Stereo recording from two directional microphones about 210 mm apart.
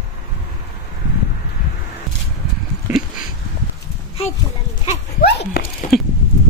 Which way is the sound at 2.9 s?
5° right (ahead or behind).